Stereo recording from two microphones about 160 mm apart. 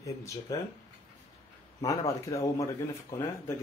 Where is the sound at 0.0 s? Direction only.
20° left (ahead or behind).